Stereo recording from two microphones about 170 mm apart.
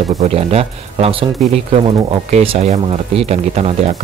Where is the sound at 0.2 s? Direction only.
35° right (ahead or behind).